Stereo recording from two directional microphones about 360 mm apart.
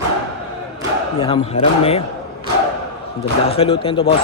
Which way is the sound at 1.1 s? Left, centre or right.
Centre.